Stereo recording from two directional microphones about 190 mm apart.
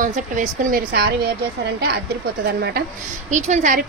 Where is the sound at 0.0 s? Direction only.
40° right (ahead or behind).